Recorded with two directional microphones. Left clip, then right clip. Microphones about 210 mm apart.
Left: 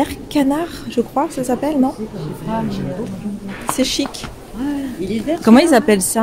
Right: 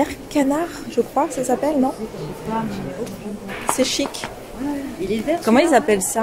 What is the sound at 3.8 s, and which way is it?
Speech, 15° left (ahead or behind).